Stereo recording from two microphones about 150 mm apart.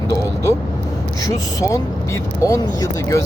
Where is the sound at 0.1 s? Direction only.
25° left (ahead or behind).